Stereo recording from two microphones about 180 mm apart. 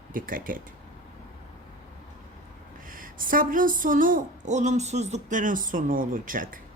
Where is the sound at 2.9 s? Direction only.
50° right (ahead or behind).